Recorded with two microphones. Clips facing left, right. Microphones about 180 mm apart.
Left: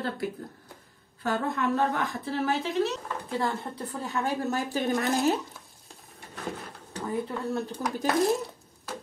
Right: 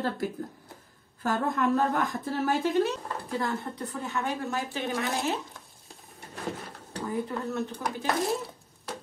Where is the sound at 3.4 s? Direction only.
25° left (ahead or behind).